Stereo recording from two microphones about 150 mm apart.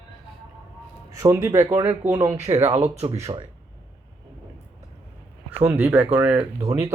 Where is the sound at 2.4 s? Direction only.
45° right (ahead or behind).